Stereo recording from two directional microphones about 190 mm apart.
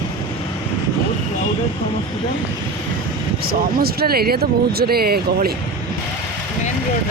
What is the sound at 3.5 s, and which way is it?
Speech, 55° right (ahead or behind).